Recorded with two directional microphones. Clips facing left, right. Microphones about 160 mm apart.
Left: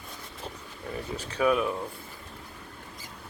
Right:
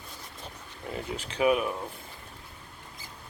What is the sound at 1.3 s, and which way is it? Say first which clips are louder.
Speech: even; 15° right (ahead or behind).